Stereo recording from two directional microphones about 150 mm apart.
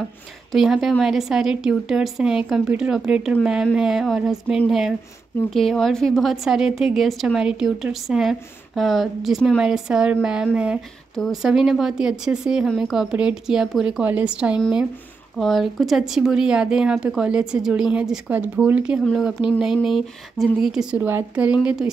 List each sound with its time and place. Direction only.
0.5 s a woman's voice: centre (ahead or behind)
19.7 s speech: 35° left (ahead or behind)
20.3 s speech: centre (ahead or behind)